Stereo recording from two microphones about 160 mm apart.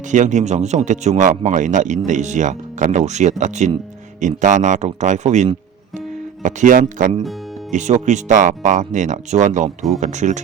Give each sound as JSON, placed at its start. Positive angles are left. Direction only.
{"t": 0.1, "sound": "speech", "side_deg": -50}